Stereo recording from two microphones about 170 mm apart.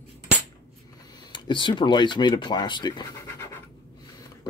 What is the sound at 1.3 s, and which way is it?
Speech, 30° left (ahead or behind).